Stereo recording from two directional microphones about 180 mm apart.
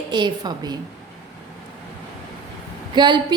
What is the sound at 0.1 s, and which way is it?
Speech, 25° right (ahead or behind).